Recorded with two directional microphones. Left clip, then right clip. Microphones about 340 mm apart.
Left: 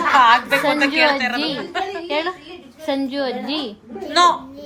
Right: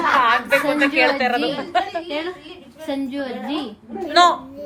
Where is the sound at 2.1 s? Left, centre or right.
Left.